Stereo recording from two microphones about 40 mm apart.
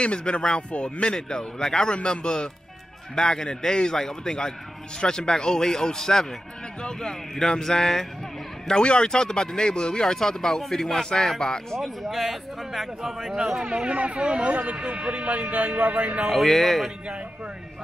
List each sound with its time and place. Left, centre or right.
0.0 s speech: left
1.1 s a man's voice: centre
8.6 s speech: left
10.1 s a man's voice: centre
11.8 s speech: centre
13.4 s speech: centre
13.8 s speech: right
14.8 s speech: right
16.3 s speech: centre